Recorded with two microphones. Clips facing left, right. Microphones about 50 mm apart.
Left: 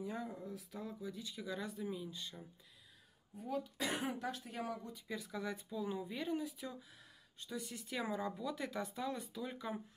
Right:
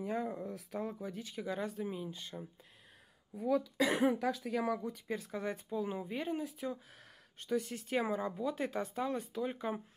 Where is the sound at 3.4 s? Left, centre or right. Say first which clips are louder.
Right 9 dB; right.